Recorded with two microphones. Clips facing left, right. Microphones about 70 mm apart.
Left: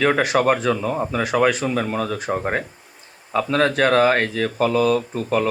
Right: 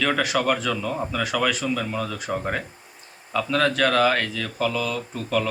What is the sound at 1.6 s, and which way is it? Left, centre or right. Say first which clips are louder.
Speech: left 4 dB; left.